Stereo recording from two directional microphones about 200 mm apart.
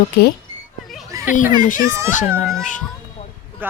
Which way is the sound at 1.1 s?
15° right (ahead or behind).